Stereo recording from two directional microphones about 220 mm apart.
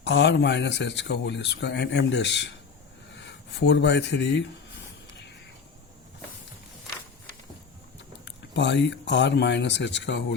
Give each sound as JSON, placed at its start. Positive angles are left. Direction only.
{"t": 0.0, "sound": "speech", "side_deg": 50}
{"t": 8.2, "sound": "speech", "side_deg": 55}